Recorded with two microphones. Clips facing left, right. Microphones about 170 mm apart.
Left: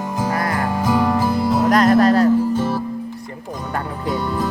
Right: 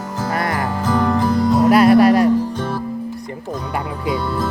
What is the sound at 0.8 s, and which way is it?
Music, 10° left (ahead or behind).